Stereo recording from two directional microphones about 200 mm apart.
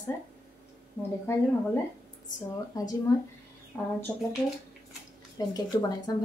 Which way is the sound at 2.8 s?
20° left (ahead or behind).